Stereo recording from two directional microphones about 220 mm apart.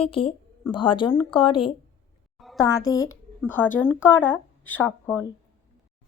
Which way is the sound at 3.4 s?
10° left (ahead or behind).